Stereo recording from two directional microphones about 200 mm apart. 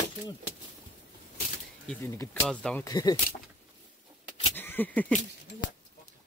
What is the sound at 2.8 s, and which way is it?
Speech, 20° left (ahead or behind).